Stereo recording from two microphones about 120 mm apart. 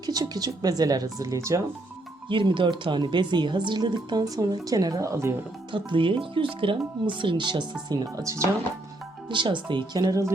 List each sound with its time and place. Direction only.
0.0 s speech: 30° right (ahead or behind)
2.3 s speech: 45° right (ahead or behind); by 5.3 s 25° right (ahead or behind)
5.7 s speech: 45° right (ahead or behind); by 8.4 s 25° right (ahead or behind)
9.3 s speech: 40° right (ahead or behind)